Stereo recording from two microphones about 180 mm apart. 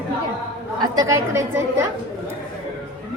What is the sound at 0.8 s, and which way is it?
Speech, 20° right (ahead or behind).